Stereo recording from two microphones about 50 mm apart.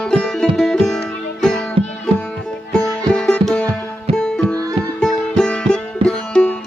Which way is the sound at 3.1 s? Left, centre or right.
Centre.